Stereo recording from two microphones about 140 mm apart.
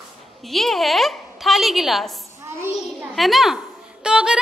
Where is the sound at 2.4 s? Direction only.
15° right (ahead or behind).